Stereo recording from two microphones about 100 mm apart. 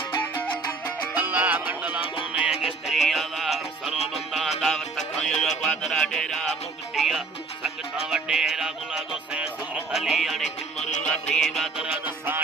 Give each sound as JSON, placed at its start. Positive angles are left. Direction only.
{"t": 0.2, "sound": "music", "side_deg": 15}
{"t": 1.1, "sound": "music", "side_deg": -15}
{"t": 11.0, "sound": "music", "side_deg": 10}